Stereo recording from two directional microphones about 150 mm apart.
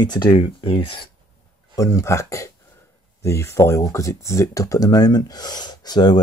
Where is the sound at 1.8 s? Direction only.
20° left (ahead or behind).